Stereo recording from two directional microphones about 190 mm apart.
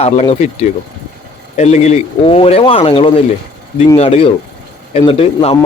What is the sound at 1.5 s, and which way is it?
Speech, 35° left (ahead or behind).